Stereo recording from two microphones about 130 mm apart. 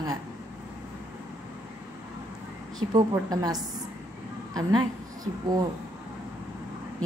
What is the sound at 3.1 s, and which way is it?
A woman's voice, 30° right (ahead or behind).